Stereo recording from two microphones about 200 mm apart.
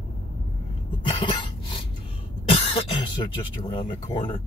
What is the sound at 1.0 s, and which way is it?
Cough, 25° left (ahead or behind).